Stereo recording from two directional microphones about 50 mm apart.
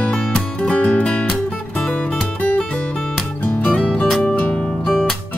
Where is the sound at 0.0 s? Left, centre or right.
Centre.